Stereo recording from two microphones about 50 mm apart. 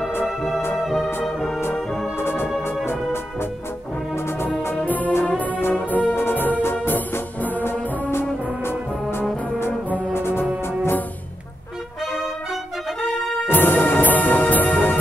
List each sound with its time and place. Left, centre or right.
0.7 s music: centre
2.1 s music: left
4.8 s music: left
5.6 s brass instrument: left
6.1 s music: left
8.1 s brass instrument: left
9.7 s music: left
10.1 s music: left
10.4 s music: right
13.5 s music: left